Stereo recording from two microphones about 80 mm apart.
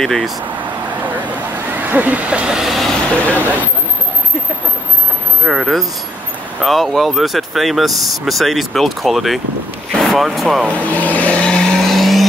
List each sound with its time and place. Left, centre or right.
0.0 s speech: centre
1.8 s speech: right
2.5 s speech: centre
5.4 s speech: centre
10.6 s vehicle: centre